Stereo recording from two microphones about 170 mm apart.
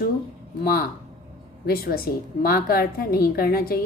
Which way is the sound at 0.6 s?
60° left (ahead or behind).